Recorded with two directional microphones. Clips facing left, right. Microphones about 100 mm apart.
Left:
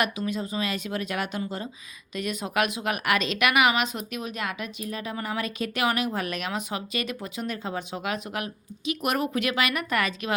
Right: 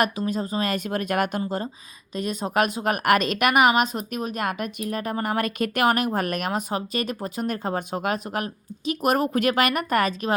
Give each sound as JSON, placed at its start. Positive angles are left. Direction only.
{"t": 0.0, "sound": "a woman's voice", "side_deg": -40}
{"t": 1.4, "sound": "a woman's voice", "side_deg": -40}